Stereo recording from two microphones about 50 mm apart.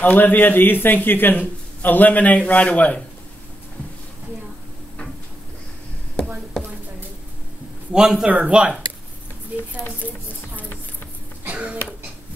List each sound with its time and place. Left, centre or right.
0.0 s a man's voice: left
7.9 s a man's voice: centre
8.3 s speech: right
11.4 s music: right